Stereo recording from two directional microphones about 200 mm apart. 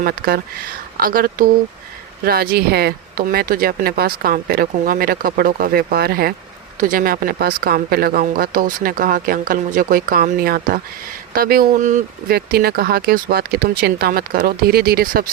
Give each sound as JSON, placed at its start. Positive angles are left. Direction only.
{"t": 0.0, "sound": "speech", "side_deg": -50}